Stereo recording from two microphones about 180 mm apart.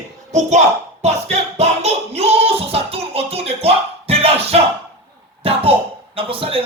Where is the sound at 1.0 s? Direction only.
40° right (ahead or behind).